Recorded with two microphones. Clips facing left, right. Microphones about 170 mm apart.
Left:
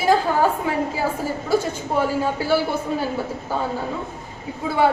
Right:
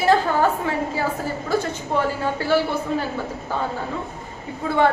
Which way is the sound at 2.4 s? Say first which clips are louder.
Right 1 dB; 10° left (ahead or behind).